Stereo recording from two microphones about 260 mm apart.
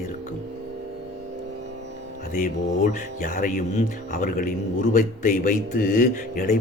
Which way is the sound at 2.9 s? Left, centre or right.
Left.